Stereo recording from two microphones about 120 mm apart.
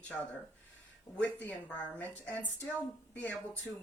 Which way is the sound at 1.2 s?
15° left (ahead or behind).